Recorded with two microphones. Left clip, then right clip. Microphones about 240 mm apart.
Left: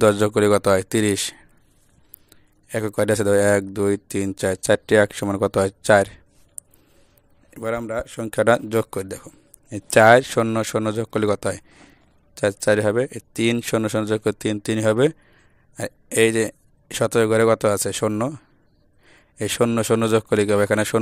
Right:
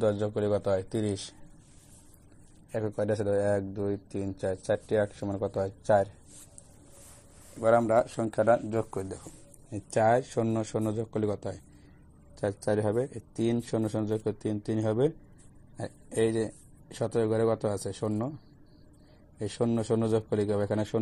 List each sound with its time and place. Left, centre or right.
0.0 s a man's voice: left
2.7 s a man's voice: left
7.7 s speech: left
8.2 s a man's voice: left
19.3 s a man's voice: left